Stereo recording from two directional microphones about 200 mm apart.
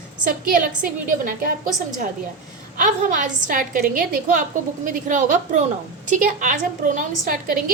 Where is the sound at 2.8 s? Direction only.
40° right (ahead or behind).